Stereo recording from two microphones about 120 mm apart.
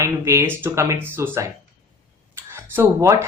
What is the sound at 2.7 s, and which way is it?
Speech, 25° right (ahead or behind).